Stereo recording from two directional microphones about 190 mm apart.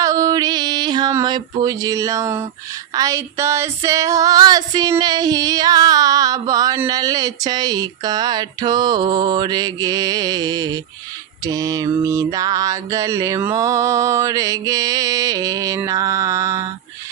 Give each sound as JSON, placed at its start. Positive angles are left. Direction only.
{"t": 0.0, "sound": "a sound", "side_deg": -20}
{"t": 2.9, "sound": "female singing", "side_deg": -15}
{"t": 11.4, "sound": "mantra", "side_deg": -20}